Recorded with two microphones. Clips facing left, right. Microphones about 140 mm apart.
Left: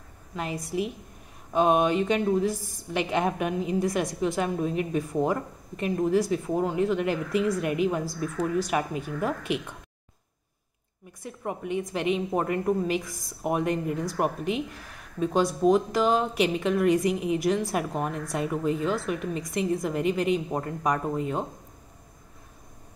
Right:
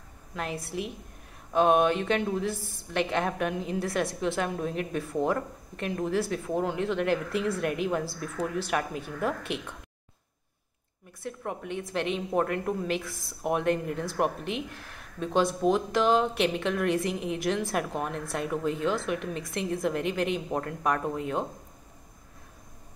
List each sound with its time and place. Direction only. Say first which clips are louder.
1.5 s a woman's voice: even; 5° left (ahead or behind)
2.4 s a woman's voice: left 4 dB; 40° left (ahead or behind)
2.9 s a woman's voice: left 2 dB; 10° left (ahead or behind)
11.2 s a woman's voice: left 2 dB; 5° left (ahead or behind)